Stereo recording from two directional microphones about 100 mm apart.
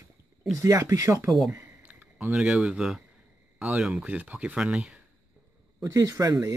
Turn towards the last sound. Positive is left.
turn(degrees=-35)  # may be behind; listen again after turning